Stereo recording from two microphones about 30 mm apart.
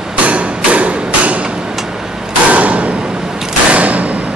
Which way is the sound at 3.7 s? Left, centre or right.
Right.